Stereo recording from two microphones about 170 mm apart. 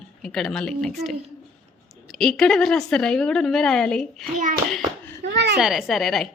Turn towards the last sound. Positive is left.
turn(degrees=0)  # may be behind; listen again after turning